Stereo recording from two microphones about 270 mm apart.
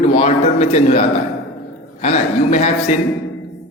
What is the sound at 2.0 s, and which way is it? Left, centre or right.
Speech, left.